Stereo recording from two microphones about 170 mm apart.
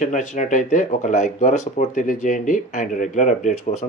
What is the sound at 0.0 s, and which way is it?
Speech, 45° left (ahead or behind).